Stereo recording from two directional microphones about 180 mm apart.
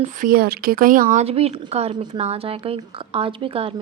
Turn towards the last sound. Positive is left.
turn(degrees=-30)  # may be behind; listen again after turning